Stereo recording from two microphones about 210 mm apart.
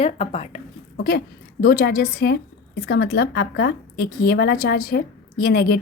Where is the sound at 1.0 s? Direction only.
50° left (ahead or behind).